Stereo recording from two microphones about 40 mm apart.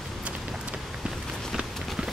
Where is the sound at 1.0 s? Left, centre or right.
Centre.